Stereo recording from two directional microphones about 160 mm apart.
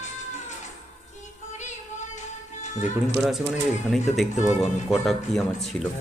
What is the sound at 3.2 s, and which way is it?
Speech, centre (ahead or behind).